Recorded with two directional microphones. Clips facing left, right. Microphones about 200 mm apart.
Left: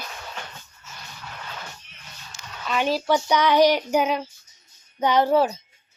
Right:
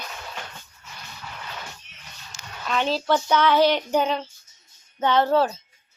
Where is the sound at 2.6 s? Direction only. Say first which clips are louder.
Left 1 dB; 10° left (ahead or behind).